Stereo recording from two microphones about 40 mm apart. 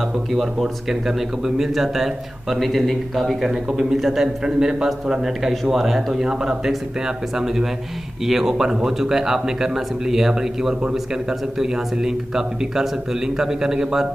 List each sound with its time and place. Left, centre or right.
0.3 s speech: centre
2.5 s a man's voice: centre
3.4 s speech: centre
6.2 s speech: centre